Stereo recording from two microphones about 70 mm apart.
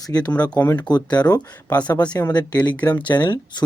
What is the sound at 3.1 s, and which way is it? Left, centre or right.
Speech, left.